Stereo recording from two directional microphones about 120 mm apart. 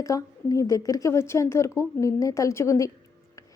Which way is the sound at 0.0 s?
30° left (ahead or behind).